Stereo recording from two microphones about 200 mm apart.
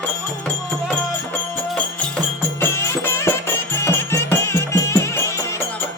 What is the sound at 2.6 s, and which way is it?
Music, 10° left (ahead or behind).